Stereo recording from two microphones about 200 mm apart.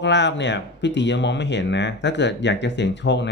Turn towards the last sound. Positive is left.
turn(degrees=60)  # may be behind; listen again after turning